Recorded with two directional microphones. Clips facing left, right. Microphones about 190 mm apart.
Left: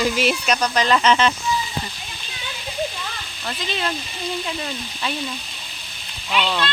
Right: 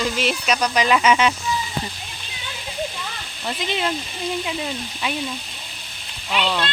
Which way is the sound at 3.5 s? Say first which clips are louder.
Right 2 dB; 20° right (ahead or behind).